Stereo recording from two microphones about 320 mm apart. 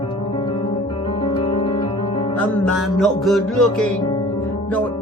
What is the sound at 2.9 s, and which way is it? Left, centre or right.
Music, centre.